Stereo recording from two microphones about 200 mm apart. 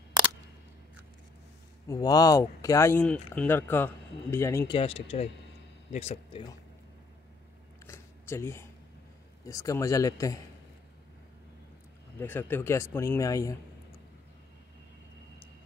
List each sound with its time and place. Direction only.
1.9 s speech: 20° left (ahead or behind)
4.7 s speech: 30° left (ahead or behind)
7.8 s a sound: 15° left (ahead or behind)
9.5 s speech: 15° left (ahead or behind)
12.2 s speech: 10° left (ahead or behind)